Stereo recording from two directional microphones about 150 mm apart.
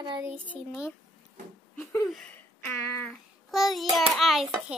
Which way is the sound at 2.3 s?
15° left (ahead or behind).